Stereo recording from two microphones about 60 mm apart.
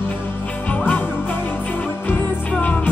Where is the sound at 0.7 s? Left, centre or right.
Left.